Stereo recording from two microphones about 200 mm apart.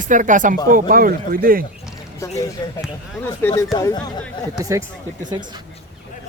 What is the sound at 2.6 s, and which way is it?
Speech, 20° left (ahead or behind).